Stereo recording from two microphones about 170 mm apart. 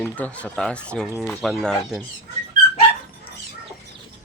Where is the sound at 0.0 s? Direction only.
5° left (ahead or behind).